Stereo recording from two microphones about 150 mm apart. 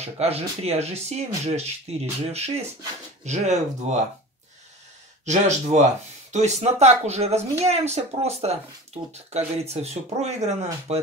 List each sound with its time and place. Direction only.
0.0 s speech: 45° right (ahead or behind)
5.2 s speech: 50° right (ahead or behind)
9.6 s speech: 45° right (ahead or behind)